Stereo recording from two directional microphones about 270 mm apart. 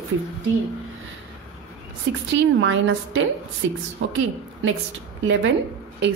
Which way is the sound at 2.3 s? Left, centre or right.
Right.